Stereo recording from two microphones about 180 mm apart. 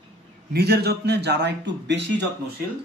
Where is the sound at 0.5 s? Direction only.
65° right (ahead or behind).